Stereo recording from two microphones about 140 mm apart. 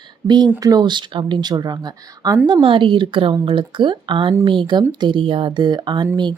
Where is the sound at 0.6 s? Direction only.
30° right (ahead or behind).